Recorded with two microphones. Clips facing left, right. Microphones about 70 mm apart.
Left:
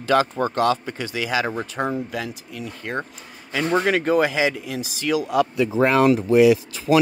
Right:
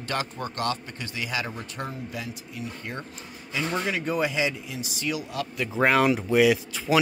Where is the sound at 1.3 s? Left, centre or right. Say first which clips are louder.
Left 10 dB; left.